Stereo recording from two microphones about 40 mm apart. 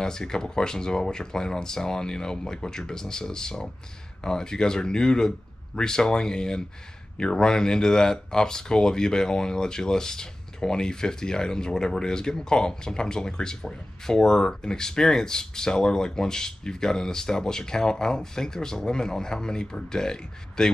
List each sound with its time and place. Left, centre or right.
0.0 s speech: centre